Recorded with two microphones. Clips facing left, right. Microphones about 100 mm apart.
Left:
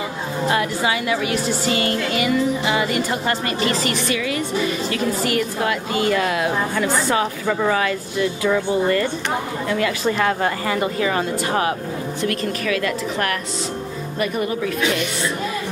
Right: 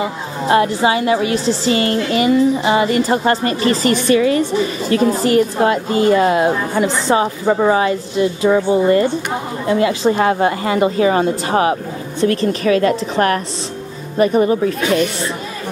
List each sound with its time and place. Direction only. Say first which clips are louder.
0.5 s music: right 8 dB; 30° right (ahead or behind)
4.9 s a woman's voice: right 11 dB; 30° right (ahead or behind)
12.2 s music: right 9 dB; 30° right (ahead or behind)